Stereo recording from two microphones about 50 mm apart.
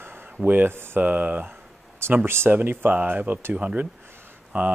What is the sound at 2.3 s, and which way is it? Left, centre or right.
Speech, right.